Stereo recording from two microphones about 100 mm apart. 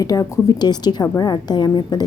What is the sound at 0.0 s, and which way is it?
A woman's voice, 35° left (ahead or behind).